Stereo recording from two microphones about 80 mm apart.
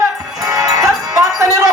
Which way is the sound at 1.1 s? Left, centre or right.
Right.